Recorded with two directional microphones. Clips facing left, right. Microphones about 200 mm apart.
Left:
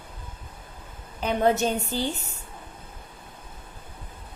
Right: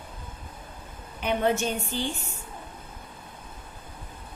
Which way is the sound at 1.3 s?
40° left (ahead or behind).